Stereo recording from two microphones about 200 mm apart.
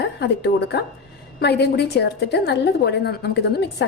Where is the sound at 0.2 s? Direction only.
55° left (ahead or behind).